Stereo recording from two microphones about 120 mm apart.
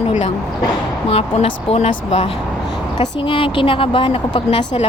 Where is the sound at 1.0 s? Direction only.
55° left (ahead or behind).